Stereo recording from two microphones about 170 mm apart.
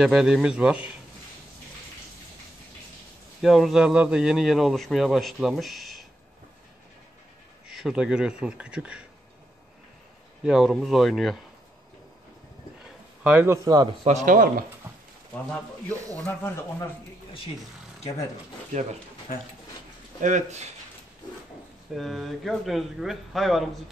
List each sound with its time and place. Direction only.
0.0 s a man's voice: centre (ahead or behind)
3.4 s a man's voice: centre (ahead or behind)
7.7 s a man's voice: 5° right (ahead or behind)
10.4 s a man's voice: centre (ahead or behind)
13.2 s speech: 10° right (ahead or behind)
14.0 s speech: 45° right (ahead or behind)
16.3 s speech: 15° left (ahead or behind)
18.7 s speech: 45° right (ahead or behind)
20.2 s speech: 45° right (ahead or behind)
21.9 s a man's voice: centre (ahead or behind)